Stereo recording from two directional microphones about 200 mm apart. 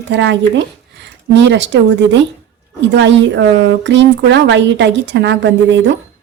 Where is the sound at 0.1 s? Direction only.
60° right (ahead or behind).